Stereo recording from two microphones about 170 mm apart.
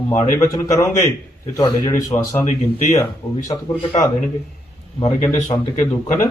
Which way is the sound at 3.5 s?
30° left (ahead or behind).